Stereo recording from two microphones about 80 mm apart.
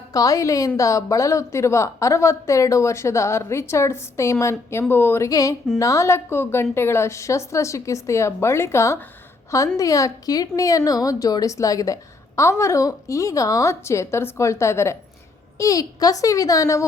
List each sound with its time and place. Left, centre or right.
0.1 s a woman's voice: left
5.3 s a woman's voice: left
12.4 s a woman's voice: left